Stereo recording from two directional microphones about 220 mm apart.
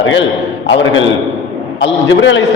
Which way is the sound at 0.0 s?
60° left (ahead or behind).